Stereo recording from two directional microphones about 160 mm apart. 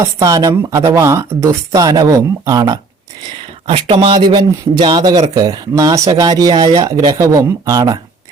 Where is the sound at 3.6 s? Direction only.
35° right (ahead or behind).